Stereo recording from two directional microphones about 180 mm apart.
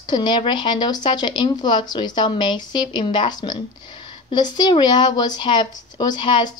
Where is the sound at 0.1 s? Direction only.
25° left (ahead or behind).